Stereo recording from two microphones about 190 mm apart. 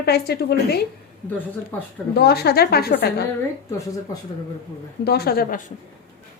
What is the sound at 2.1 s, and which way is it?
A woman's voice, 55° left (ahead or behind).